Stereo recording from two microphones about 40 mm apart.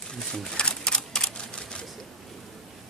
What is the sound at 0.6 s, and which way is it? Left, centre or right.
Camera, centre.